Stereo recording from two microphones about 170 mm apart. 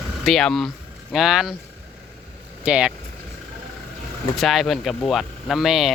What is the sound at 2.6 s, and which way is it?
Speech, 5° right (ahead or behind).